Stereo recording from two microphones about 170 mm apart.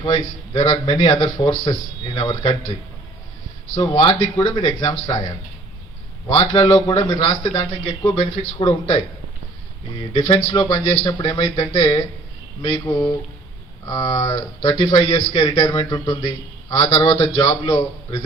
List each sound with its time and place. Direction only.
0.0 s a man's voice: 35° left (ahead or behind)
3.8 s a man's voice: 30° left (ahead or behind)
6.2 s speech: 30° left (ahead or behind)
10.0 s speech: 30° left (ahead or behind)